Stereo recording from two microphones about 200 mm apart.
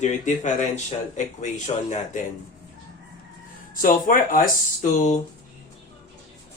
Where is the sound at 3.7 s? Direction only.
45° left (ahead or behind).